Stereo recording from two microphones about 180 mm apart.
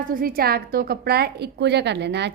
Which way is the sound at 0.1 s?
55° right (ahead or behind).